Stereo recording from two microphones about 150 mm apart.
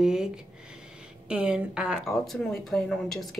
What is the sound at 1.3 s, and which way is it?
Speech, 5° right (ahead or behind).